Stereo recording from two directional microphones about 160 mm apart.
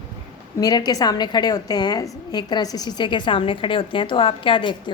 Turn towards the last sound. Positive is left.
turn(degrees=30)  # may be behind; listen again after turning